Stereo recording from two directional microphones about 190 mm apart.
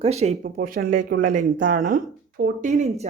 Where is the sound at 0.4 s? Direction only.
50° right (ahead or behind).